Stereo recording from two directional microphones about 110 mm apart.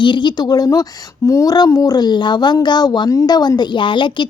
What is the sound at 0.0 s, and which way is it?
A woman's voice, 45° left (ahead or behind).